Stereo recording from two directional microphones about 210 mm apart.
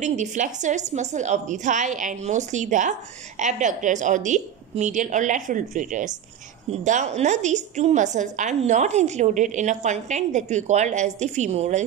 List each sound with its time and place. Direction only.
0.0 s a woman's voice: 35° right (ahead or behind)